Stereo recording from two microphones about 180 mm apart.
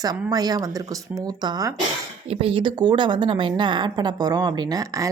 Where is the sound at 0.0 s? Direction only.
20° right (ahead or behind).